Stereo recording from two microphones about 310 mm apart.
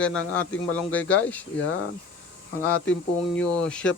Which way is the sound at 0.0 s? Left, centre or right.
Centre.